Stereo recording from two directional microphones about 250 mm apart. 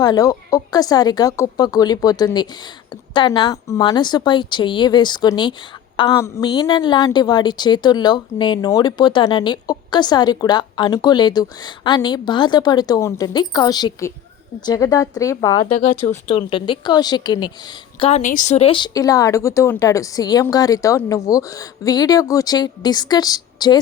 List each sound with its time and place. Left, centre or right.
0.0 s a woman's voice: centre
15.7 s a woman's voice: left